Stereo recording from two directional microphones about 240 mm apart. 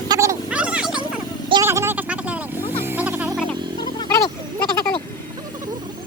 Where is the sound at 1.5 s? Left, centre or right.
Centre.